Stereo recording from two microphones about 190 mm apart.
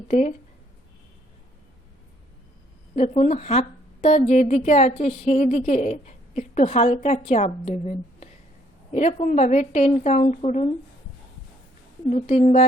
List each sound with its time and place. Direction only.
0.1 s a woman's voice: 40° left (ahead or behind)
2.9 s a woman's voice: 40° left (ahead or behind)
12.1 s a woman's voice: 35° left (ahead or behind)